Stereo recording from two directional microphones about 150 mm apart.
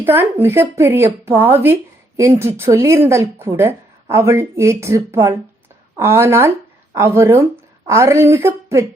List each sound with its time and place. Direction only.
0.0 s a woman's voice: 15° right (ahead or behind)